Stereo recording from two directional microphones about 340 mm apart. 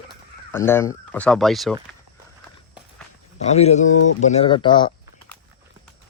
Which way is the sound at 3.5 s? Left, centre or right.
Centre.